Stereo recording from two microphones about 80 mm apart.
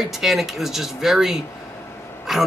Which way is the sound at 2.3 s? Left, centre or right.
Centre.